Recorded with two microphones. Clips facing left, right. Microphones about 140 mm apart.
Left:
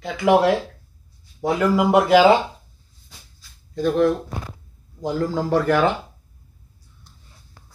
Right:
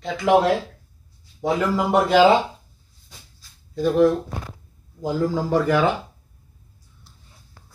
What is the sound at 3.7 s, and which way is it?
Speech, 5° right (ahead or behind).